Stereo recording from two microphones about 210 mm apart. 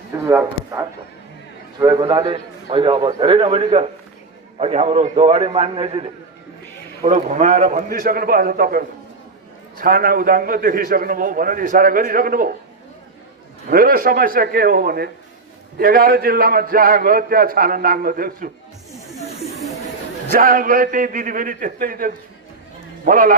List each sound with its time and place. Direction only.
0.2 s a man's voice: 15° right (ahead or behind); by 12.5 s 40° right (ahead or behind)
13.7 s a man's voice: 40° right (ahead or behind)
18.9 s snake: centre (ahead or behind)
20.2 s a man's voice: 40° right (ahead or behind)